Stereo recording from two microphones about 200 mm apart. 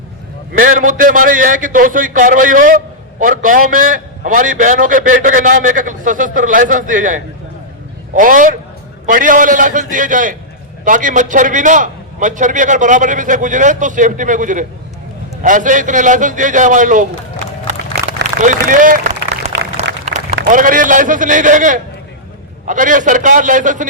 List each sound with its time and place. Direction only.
0.5 s a man's voice: 45° right (ahead or behind)
18.3 s a man's voice: 40° right (ahead or behind)
19.4 s a sound: 30° right (ahead or behind)
20.5 s a man's voice: 40° right (ahead or behind)